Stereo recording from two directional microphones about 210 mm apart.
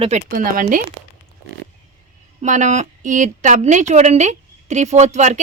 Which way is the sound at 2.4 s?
35° right (ahead or behind).